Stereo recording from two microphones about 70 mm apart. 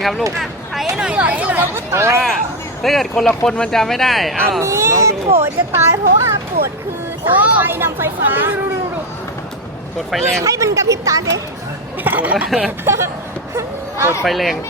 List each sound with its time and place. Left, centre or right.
0.0 s speech: centre
0.9 s speech: centre
1.9 s speech: right
2.8 s speech: centre
4.6 s a child's voice: right
7.3 s speech: right
10.1 s speech: centre
10.4 s a child's voice: right
12.0 s speech: right
12.5 s speech: centre
12.8 s speech: right
14.3 s speech: centre